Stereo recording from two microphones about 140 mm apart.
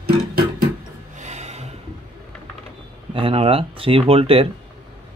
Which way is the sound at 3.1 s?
40° right (ahead or behind).